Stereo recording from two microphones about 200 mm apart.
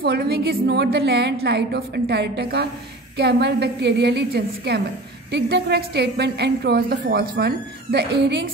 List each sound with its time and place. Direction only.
0.0 s a woman's voice: 50° right (ahead or behind)